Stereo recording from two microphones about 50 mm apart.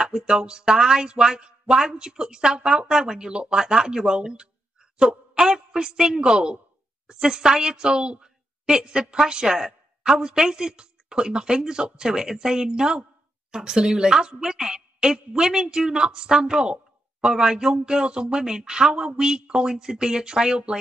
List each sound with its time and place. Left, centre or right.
0.0 s a woman's voice: centre